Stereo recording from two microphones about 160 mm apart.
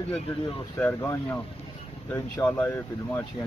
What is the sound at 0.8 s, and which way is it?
Speech, 15° left (ahead or behind).